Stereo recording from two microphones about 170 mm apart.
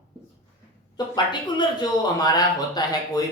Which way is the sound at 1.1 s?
25° left (ahead or behind).